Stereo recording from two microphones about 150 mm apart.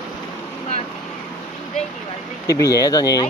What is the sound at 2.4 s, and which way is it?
Speech, 20° left (ahead or behind).